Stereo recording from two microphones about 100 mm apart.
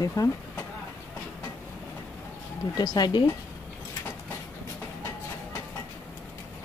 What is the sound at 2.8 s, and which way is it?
Speech, 45° left (ahead or behind).